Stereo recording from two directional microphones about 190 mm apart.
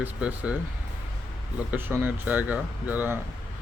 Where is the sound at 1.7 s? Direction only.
10° right (ahead or behind).